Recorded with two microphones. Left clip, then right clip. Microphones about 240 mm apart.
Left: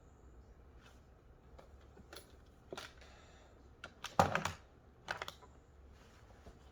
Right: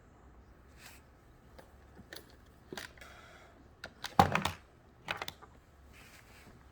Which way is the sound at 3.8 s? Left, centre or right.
Right.